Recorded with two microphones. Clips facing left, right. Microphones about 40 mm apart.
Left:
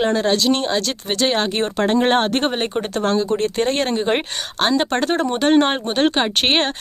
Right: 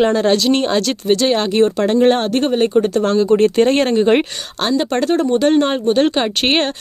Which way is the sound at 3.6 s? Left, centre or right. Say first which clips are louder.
Right 6 dB; centre.